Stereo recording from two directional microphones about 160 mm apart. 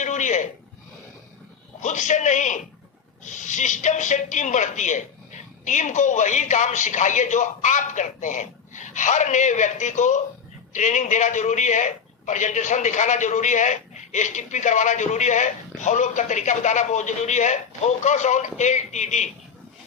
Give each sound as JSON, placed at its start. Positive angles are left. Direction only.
{"t": 0.0, "sound": "bleat", "side_deg": 50}
{"t": 1.8, "sound": "a man's voice", "side_deg": 50}